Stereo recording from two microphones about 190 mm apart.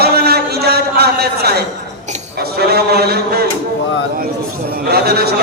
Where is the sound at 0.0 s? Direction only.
55° right (ahead or behind).